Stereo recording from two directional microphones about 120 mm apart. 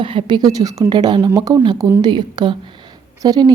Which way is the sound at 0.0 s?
45° right (ahead or behind).